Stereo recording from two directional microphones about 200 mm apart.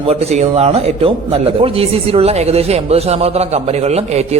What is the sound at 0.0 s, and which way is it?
A man's voice, 30° right (ahead or behind).